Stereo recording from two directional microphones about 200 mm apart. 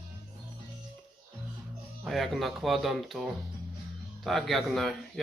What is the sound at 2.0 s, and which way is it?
Speech, centre (ahead or behind).